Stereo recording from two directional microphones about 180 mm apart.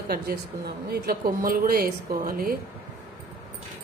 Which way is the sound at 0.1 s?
60° right (ahead or behind).